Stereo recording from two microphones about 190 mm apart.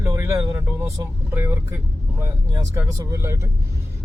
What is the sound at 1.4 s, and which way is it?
A man's voice, 10° right (ahead or behind).